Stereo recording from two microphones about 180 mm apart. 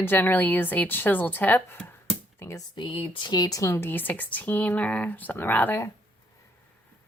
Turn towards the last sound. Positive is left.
turn(degrees=10)  # may be behind; listen again after turning